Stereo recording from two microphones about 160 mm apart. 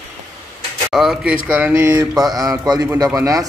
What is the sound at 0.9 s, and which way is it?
Speech, centre (ahead or behind).